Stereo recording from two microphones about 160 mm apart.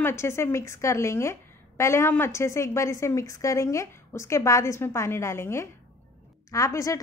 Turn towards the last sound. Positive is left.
turn(degrees=20)  # may be behind; listen again after turning